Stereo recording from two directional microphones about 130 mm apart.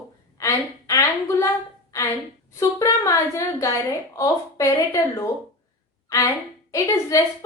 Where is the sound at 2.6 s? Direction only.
25° left (ahead or behind).